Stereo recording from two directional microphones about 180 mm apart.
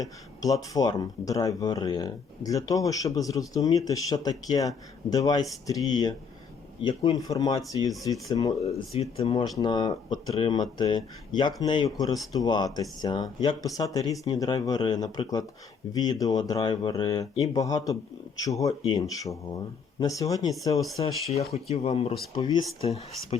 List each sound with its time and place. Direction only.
0.0 s speech: 20° left (ahead or behind)
9.0 s speech: 35° left (ahead or behind); by 20.8 s 20° left (ahead or behind)
21.5 s speech: 35° left (ahead or behind)
22.4 s speech: 20° left (ahead or behind)